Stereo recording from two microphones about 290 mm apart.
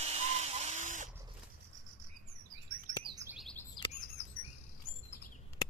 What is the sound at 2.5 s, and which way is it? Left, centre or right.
Chirp, right.